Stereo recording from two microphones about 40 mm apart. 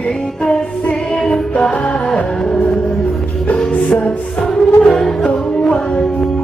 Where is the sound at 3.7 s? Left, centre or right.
Left.